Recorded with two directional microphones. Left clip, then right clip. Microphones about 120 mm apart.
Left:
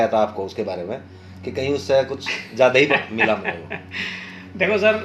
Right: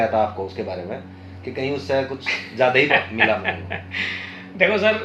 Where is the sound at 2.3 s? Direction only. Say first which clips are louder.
Even; 40° left (ahead or behind).